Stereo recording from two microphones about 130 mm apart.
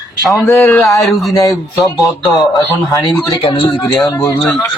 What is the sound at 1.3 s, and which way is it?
Speech, 25° left (ahead or behind).